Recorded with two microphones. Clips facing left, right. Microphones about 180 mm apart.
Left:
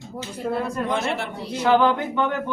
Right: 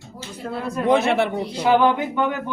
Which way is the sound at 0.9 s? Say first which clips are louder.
Right 7 dB; 65° right (ahead or behind).